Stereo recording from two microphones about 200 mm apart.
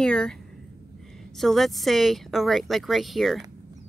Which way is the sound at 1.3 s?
Centre (ahead or behind).